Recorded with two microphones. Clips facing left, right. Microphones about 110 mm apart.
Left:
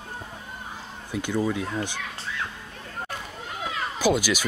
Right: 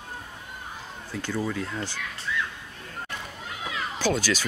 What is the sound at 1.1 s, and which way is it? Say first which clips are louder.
Speech: left 4 dB; 15° left (ahead or behind).